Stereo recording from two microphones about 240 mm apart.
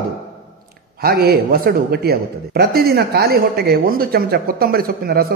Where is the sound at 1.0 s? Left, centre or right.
Right.